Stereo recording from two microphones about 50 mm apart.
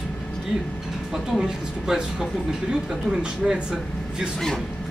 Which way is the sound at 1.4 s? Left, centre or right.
Centre.